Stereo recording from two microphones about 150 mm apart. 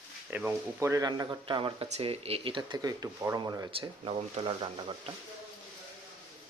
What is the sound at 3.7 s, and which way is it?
Speech, 35° right (ahead or behind).